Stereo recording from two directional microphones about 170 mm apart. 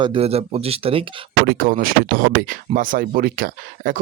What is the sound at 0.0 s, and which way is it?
Speech, 35° right (ahead or behind).